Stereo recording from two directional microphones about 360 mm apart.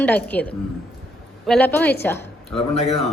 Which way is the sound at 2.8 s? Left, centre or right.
Centre.